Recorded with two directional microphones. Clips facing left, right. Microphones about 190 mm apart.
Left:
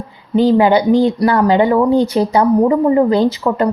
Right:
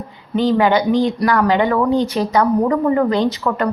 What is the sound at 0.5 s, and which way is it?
A woman's voice, 15° left (ahead or behind).